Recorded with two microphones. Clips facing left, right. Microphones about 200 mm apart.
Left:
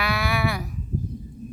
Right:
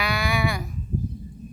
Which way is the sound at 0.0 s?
Centre (ahead or behind).